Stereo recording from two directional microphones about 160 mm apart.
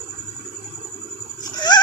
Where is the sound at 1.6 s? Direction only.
25° left (ahead or behind).